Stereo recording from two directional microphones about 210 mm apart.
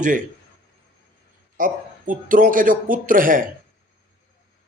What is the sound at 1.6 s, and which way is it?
Speech, 40° right (ahead or behind).